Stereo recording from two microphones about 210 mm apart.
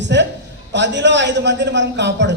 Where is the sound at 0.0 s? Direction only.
55° right (ahead or behind).